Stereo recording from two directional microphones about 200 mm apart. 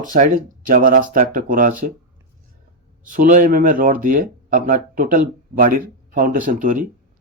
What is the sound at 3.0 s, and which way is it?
Speech, 40° right (ahead or behind).